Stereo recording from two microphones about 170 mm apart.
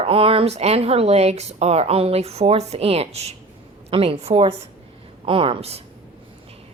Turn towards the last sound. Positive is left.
turn(degrees=-35)  # may be behind; listen again after turning